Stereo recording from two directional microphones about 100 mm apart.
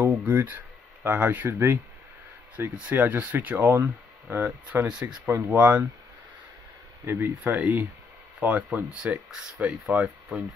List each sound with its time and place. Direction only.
0.0 s speech: 15° right (ahead or behind)
5.6 s speech: 10° right (ahead or behind)
7.1 s speech: 20° right (ahead or behind)